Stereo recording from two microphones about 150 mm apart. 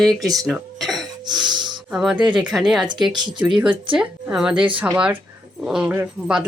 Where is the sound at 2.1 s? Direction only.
30° right (ahead or behind).